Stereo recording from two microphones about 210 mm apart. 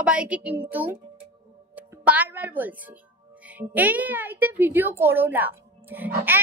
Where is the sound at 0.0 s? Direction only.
5° right (ahead or behind).